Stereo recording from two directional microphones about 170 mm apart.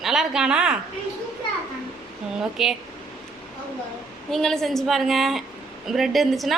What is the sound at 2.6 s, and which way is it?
Speech, centre (ahead or behind).